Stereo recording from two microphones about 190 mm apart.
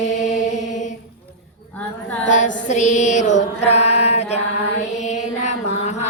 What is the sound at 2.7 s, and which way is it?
Mantra, 40° left (ahead or behind).